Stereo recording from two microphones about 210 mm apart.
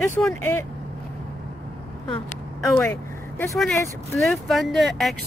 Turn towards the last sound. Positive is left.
turn(degrees=0)  # may be behind; listen again after turning